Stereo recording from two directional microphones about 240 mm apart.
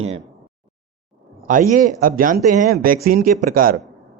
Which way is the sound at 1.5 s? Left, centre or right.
Right.